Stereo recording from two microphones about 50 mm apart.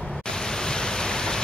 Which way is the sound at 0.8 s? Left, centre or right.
Centre.